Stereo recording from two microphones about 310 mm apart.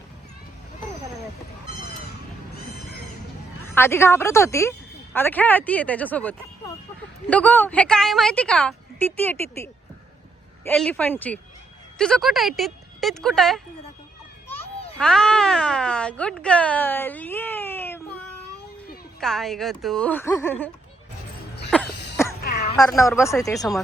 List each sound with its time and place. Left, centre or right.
3.8 s a woman's voice: centre
14.9 s a woman's voice: centre
22.4 s a sound: left
22.9 s a woman's voice: centre